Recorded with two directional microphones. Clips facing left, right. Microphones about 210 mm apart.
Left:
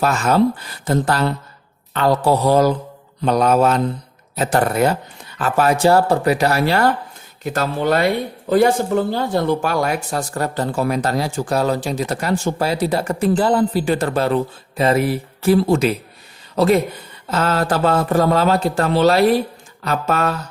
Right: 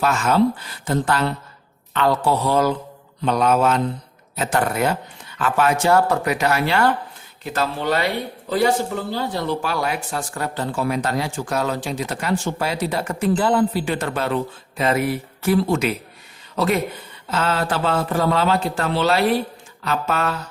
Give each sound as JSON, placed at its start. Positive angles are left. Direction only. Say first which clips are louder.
{"t": 0.0, "sound": "speech", "louder": "left 2 dB", "side_deg": 40}